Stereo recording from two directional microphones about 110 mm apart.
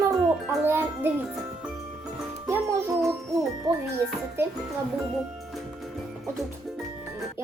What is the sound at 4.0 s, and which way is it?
Speech, 20° right (ahead or behind).